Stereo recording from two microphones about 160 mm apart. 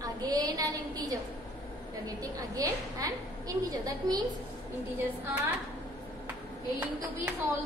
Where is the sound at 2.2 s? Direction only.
20° right (ahead or behind).